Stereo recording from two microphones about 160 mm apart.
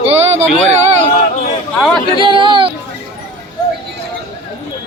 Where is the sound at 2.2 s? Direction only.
30° right (ahead or behind).